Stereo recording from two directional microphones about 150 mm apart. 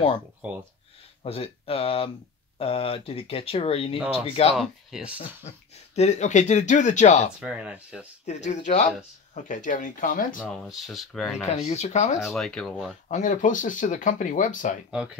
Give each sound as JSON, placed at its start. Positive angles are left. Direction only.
{"t": 1.2, "sound": "speech", "side_deg": 40}
{"t": 4.6, "sound": "speech", "side_deg": -5}
{"t": 5.9, "sound": "speech", "side_deg": 50}
{"t": 7.3, "sound": "speech", "side_deg": -10}
{"t": 8.3, "sound": "speech", "side_deg": 50}
{"t": 10.4, "sound": "speech", "side_deg": 0}
{"t": 11.5, "sound": "speech", "side_deg": 45}
{"t": 12.3, "sound": "speech", "side_deg": 5}
{"t": 13.1, "sound": "speech", "side_deg": 55}
{"t": 14.9, "sound": "speech", "side_deg": -5}